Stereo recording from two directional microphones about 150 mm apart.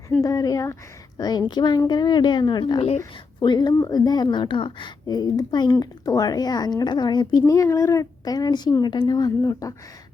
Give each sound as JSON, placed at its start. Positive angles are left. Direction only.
{"t": 0.2, "sound": "speech", "side_deg": 25}